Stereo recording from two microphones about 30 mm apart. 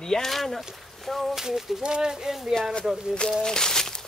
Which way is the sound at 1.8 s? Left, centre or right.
Right.